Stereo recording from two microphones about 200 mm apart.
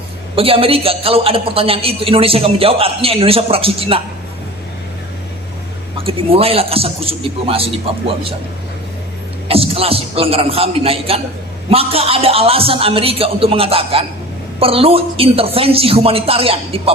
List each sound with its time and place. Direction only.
0.3 s a woman's voice: 30° right (ahead or behind)
6.0 s a woman's voice: 30° right (ahead or behind)
9.5 s a woman's voice: 30° right (ahead or behind)